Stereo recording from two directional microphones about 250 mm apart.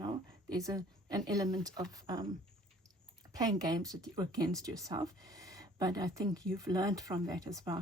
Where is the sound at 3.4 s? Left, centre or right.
Centre.